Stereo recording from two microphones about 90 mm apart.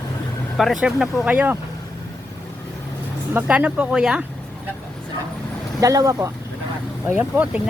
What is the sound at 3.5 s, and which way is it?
Speech, 10° right (ahead or behind).